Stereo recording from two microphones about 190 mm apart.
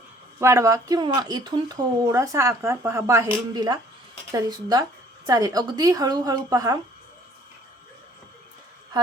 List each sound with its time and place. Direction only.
0.3 s speech: 15° right (ahead or behind)